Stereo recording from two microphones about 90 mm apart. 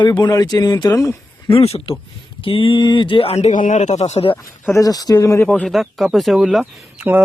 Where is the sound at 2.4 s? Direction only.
80° left.